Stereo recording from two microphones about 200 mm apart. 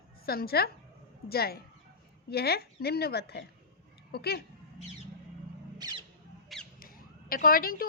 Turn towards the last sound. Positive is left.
turn(degrees=45)  # may be behind; listen again after turning